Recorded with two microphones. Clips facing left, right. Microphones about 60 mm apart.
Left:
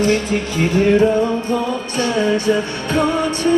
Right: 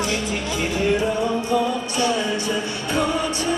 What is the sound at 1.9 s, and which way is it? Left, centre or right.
Music, left.